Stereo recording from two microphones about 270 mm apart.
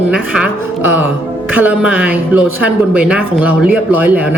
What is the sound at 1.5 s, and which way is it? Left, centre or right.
Speech, centre.